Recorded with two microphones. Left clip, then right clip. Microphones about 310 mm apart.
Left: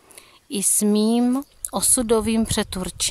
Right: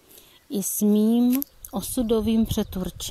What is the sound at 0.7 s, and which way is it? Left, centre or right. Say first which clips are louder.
Speech: left 2 dB; left.